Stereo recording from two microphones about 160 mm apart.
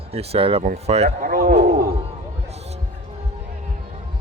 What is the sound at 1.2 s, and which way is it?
Speech, 65° right (ahead or behind).